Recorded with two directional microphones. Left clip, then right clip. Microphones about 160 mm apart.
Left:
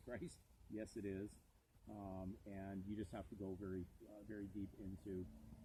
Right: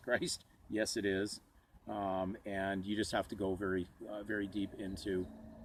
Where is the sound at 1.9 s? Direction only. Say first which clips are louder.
Right 17 dB; 20° right (ahead or behind).